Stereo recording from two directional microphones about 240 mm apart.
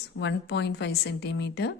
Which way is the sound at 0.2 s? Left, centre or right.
Left.